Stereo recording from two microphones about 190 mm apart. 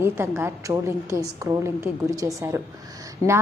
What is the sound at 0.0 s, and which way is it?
A woman's voice, 10° right (ahead or behind).